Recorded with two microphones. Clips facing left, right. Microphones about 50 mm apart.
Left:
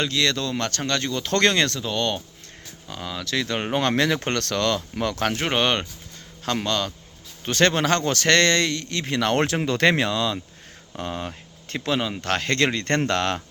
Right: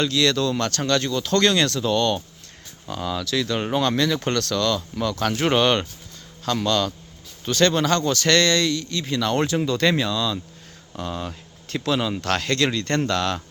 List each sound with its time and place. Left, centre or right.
0.0 s speech: left
1.2 s speech: left
1.8 s speech: centre
3.2 s speech: left
3.8 s speech: left
5.4 s speech: centre
6.4 s speech: left
7.6 s speech: left
10.9 s speech: left
12.5 s speech: left